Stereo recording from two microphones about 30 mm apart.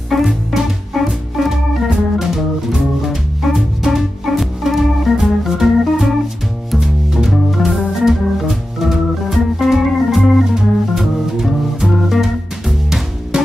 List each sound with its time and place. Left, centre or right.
0.1 s music: centre
1.9 s music: centre
7.2 s music: centre
8.0 s organ: centre
10.5 s music: centre